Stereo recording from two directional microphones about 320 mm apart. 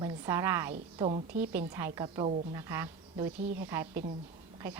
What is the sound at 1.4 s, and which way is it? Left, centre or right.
A woman's voice, centre.